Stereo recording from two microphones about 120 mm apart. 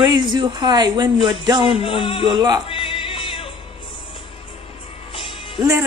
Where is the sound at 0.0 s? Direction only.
40° right (ahead or behind).